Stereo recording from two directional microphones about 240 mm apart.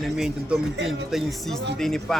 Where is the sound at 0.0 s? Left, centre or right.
Centre.